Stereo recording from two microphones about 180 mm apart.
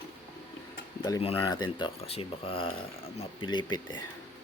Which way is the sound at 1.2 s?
30° left (ahead or behind).